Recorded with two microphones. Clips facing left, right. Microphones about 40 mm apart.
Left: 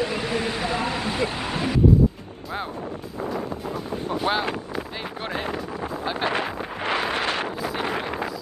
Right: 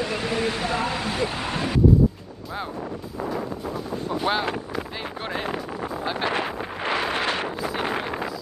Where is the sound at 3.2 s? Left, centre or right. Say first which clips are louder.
Even; centre.